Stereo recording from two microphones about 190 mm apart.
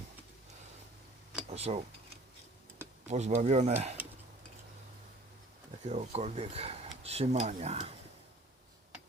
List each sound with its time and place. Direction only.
1.5 s speech: 35° right (ahead or behind)
3.1 s speech: 35° right (ahead or behind)
5.9 s speech: 35° right (ahead or behind)